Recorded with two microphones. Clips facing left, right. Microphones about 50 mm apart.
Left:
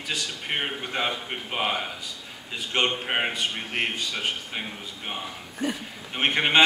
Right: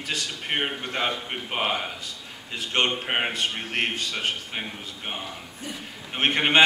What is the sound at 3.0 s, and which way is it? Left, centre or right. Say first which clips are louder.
Speech: even; centre.